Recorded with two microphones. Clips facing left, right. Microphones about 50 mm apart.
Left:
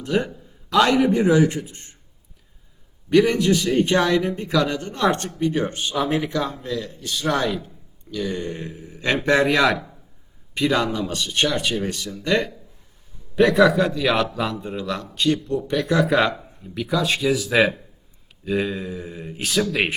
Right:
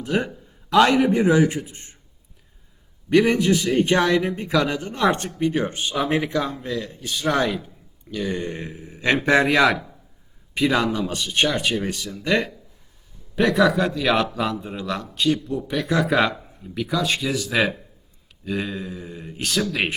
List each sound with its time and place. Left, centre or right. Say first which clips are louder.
0.0 s a sound: left 1 dB; centre
1.1 s a man's voice: even; right
3.2 s speech: even; centre
5.9 s a man's voice: even; right
6.2 s a man's voice: even; centre
9.1 s a man's voice: even; centre